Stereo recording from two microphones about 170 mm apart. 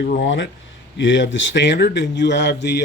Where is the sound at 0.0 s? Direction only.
75° left (ahead or behind).